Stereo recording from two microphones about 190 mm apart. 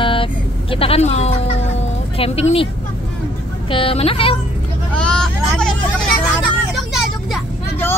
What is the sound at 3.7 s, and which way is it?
Speech, 30° left (ahead or behind).